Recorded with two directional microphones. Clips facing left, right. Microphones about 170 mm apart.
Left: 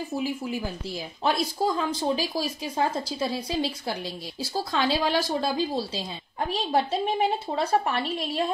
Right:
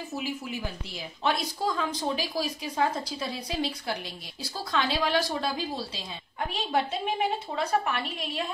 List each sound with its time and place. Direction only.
1.2 s a woman's voice: 30° left (ahead or behind)
6.5 s a woman's voice: 35° left (ahead or behind)